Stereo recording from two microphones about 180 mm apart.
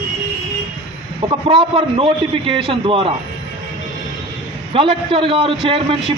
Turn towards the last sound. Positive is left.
turn(degrees=-30)  # may be behind; listen again after turning